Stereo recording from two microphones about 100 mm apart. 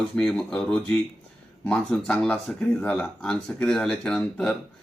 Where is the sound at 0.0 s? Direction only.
5° left (ahead or behind).